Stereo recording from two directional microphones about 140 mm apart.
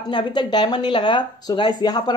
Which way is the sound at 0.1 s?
30° left (ahead or behind).